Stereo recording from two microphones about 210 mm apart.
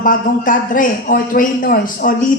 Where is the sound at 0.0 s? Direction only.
40° left (ahead or behind).